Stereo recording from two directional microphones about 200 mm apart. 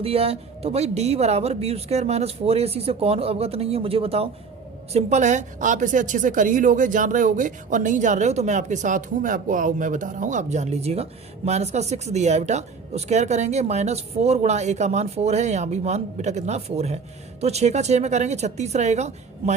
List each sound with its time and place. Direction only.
0.0 s a woman's voice: 30° right (ahead or behind)